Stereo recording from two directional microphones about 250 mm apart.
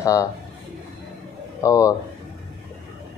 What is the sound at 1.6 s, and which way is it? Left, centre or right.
Speech, centre.